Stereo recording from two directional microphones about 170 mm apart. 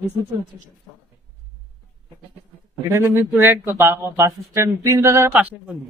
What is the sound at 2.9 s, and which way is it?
Speech, 15° right (ahead or behind).